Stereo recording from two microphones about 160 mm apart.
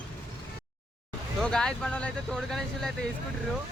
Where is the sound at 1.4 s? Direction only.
5° left (ahead or behind).